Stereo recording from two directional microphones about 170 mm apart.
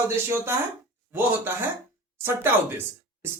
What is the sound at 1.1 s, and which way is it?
Speech, 15° right (ahead or behind).